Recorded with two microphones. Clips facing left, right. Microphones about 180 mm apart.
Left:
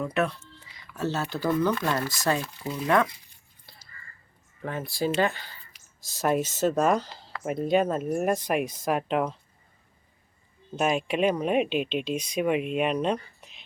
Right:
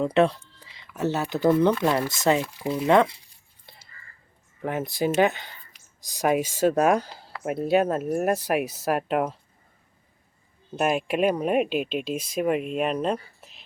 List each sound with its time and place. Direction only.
0.0 s speech: 30° right (ahead or behind)
0.8 s speech: 15° right (ahead or behind)
4.6 s speech: 20° right (ahead or behind)
10.8 s speech: 5° right (ahead or behind)